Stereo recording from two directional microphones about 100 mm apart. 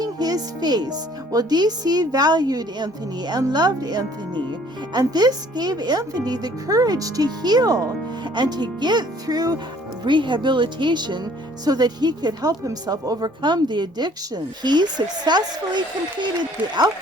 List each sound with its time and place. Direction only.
0.0 s speech: 40° right (ahead or behind)
10.0 s speech: 50° right (ahead or behind)